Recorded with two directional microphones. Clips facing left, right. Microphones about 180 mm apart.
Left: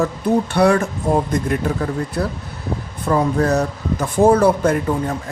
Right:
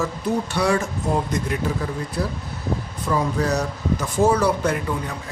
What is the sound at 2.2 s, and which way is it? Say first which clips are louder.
A man's voice: left 3 dB; 60° left (ahead or behind).